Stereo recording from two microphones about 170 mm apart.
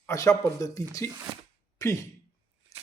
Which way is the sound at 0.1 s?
20° left (ahead or behind).